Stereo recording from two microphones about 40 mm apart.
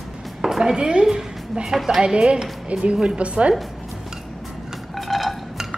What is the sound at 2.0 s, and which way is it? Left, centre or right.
Speech, right.